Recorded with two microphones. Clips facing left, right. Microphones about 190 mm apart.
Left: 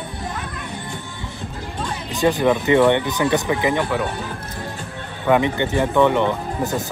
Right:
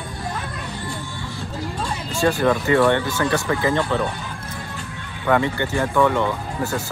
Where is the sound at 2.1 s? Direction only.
20° left (ahead or behind).